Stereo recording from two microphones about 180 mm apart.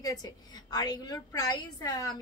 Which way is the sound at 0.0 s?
20° left (ahead or behind).